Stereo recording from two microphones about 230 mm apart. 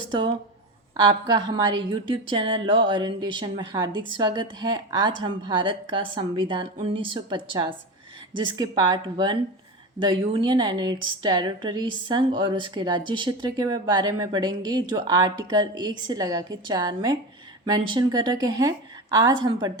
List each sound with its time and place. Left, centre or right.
0.1 s a woman's voice: right